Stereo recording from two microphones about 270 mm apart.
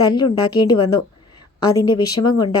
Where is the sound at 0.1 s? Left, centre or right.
Centre.